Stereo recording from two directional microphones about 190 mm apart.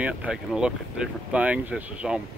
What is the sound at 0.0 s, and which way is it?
Speech, 5° right (ahead or behind).